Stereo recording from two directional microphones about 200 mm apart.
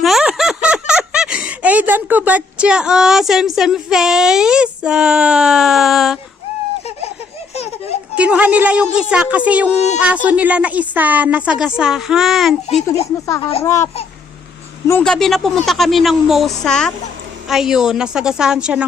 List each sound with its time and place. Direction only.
0.0 s speech: centre (ahead or behind)
7.5 s baby laughter: 30° left (ahead or behind)
8.1 s a woman's voice: 5° right (ahead or behind)
12.6 s a child's voice: 30° left (ahead or behind)
13.2 s a child's voice: 15° left (ahead or behind); by 18.9 s 5° right (ahead or behind)